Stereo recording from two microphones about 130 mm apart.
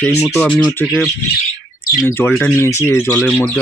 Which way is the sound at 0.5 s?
5° left (ahead or behind).